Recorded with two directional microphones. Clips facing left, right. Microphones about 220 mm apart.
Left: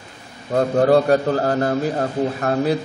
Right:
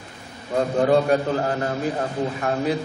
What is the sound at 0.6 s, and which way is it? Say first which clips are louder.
A man's voice: left 3 dB; 40° left (ahead or behind).